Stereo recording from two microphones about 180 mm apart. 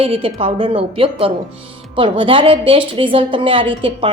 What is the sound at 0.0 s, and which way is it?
A woman's voice, 30° right (ahead or behind).